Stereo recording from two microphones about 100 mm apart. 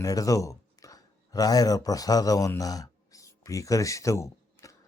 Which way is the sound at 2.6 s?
35° left (ahead or behind).